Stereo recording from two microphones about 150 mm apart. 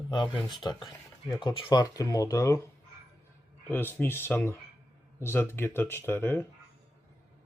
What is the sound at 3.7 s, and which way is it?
Speech, 15° left (ahead or behind).